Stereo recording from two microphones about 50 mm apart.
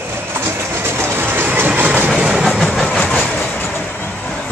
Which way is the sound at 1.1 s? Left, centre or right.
Right.